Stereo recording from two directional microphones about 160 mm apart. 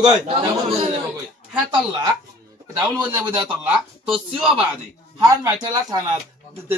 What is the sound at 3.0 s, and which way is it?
Speech, 30° right (ahead or behind).